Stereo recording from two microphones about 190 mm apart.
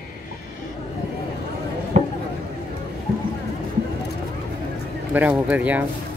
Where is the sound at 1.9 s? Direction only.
40° right (ahead or behind).